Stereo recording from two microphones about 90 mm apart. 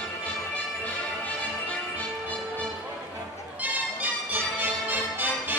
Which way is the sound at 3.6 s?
20° right (ahead or behind).